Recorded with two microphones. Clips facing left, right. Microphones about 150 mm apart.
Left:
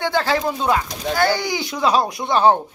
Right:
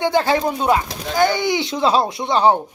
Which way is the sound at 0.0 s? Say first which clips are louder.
Right 3 dB; 20° right (ahead or behind).